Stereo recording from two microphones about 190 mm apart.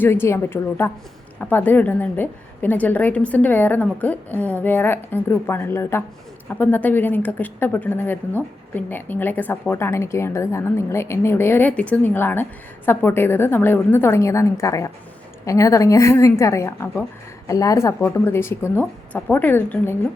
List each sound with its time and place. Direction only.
0.0 s a woman's voice: 10° left (ahead or behind)